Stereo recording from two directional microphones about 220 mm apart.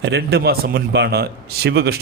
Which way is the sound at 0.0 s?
50° right (ahead or behind).